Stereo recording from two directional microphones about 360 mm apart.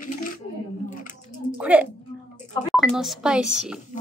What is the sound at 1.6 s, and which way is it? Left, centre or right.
A woman's voice, centre.